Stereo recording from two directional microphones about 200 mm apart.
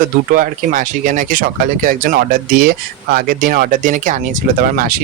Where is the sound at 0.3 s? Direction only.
40° right (ahead or behind).